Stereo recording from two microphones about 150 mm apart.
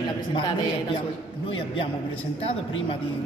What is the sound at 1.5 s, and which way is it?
Speech, 35° left (ahead or behind).